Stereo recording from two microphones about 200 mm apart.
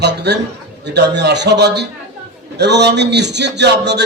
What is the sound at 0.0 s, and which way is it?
A man's voice, 55° right (ahead or behind).